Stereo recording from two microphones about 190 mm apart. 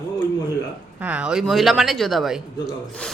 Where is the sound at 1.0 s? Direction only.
5° right (ahead or behind).